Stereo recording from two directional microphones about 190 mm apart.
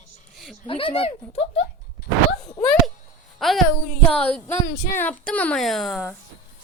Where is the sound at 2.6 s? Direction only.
Centre (ahead or behind).